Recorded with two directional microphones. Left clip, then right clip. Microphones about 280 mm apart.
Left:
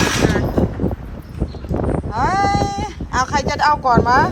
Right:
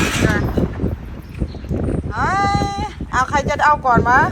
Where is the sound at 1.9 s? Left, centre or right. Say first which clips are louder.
Left 1 dB; centre.